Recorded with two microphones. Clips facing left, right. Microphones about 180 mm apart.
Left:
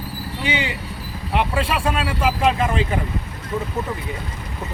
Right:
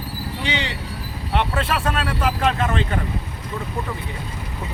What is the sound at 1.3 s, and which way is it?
Speech, 5° left (ahead or behind).